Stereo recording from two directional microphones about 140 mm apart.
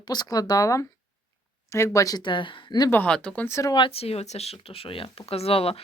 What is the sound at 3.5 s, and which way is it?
Speech, 20° left (ahead or behind).